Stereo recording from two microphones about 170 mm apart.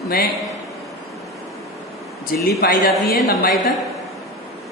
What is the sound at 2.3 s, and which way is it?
Speech, 65° left (ahead or behind).